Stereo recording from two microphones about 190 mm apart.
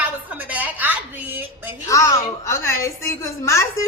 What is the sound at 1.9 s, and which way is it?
A woman's voice, 15° left (ahead or behind).